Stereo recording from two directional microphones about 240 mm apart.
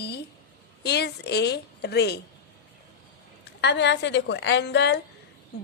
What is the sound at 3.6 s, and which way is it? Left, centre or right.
A woman's voice, left.